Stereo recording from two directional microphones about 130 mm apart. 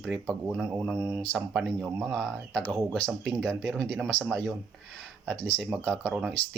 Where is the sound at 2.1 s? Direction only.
5° left (ahead or behind).